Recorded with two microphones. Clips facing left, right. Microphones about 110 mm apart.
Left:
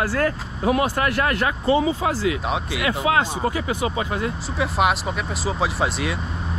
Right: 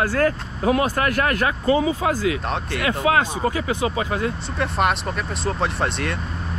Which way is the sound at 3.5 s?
25° left (ahead or behind).